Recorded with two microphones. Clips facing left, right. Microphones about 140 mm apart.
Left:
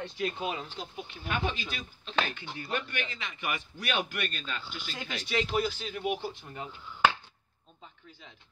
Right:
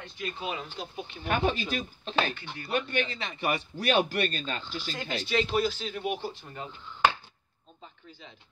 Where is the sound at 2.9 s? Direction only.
30° right (ahead or behind).